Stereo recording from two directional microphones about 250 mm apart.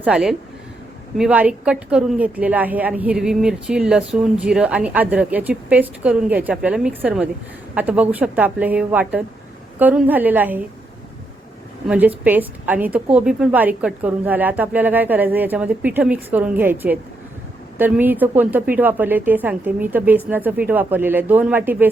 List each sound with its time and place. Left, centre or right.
0.0 s a woman's voice: centre
11.9 s a woman's voice: centre